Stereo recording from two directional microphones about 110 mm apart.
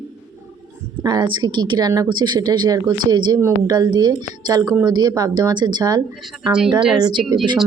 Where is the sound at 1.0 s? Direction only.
40° right (ahead or behind).